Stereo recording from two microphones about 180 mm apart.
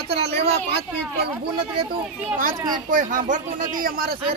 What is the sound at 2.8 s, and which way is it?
Speech, 45° right (ahead or behind).